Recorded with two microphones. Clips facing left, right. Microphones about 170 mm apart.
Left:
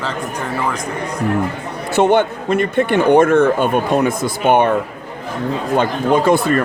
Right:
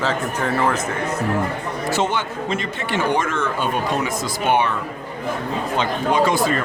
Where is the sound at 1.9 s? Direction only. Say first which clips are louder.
Left 10 dB; 60° left (ahead or behind).